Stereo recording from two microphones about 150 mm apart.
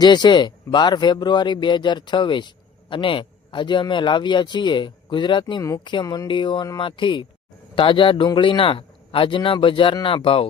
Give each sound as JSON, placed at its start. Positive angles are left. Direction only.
{"t": 0.0, "sound": "speech", "side_deg": 30}